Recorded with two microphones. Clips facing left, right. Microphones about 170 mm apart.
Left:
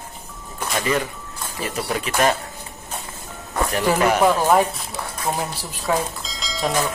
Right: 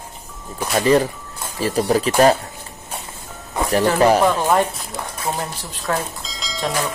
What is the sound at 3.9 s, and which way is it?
Speech, 35° right (ahead or behind).